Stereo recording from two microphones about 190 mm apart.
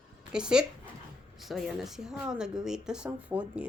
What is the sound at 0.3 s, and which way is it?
A woman's voice, 5° right (ahead or behind).